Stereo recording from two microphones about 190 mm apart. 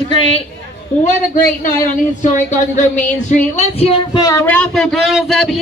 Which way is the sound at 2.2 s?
40° left (ahead or behind).